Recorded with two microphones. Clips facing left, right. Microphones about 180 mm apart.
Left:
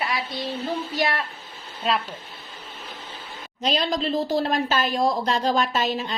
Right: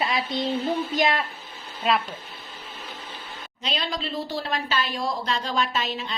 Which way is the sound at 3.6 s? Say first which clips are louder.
Left 6 dB; 40° left (ahead or behind).